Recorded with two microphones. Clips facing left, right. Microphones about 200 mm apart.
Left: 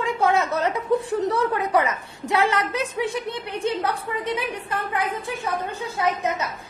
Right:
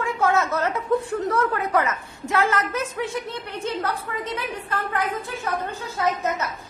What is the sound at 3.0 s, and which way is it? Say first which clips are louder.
Speech: left 2 dB; 15° left (ahead or behind).